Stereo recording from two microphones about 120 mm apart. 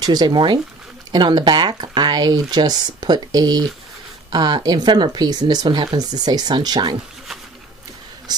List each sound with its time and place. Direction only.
0.0 s speech: 35° right (ahead or behind)
8.3 s speech: 35° right (ahead or behind)